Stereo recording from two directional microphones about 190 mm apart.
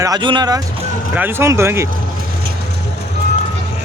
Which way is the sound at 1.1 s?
10° right (ahead or behind).